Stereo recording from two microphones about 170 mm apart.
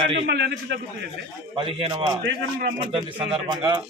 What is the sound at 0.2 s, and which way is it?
Speech, 80° right.